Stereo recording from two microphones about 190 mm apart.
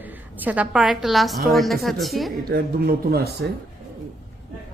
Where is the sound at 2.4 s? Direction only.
55° right (ahead or behind).